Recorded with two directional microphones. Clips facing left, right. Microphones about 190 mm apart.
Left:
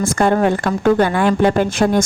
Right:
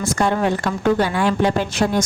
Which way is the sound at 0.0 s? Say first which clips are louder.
Left 4 dB; 50° left (ahead or behind).